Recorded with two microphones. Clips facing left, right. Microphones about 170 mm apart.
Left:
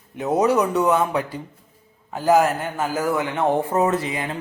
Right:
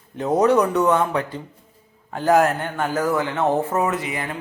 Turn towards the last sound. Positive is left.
turn(degrees=35)  # may be behind; listen again after turning